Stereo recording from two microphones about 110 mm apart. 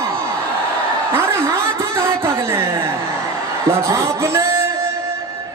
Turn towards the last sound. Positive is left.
turn(degrees=-25)  # may be behind; listen again after turning